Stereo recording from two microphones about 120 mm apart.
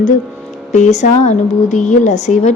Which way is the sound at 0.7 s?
80° left.